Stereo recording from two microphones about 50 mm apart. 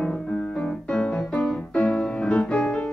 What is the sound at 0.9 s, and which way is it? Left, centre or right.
Music, centre.